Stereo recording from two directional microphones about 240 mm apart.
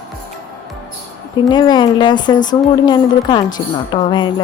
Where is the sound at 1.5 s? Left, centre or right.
Centre.